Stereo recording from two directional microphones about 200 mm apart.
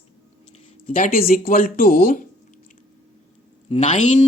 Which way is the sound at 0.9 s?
45° left (ahead or behind).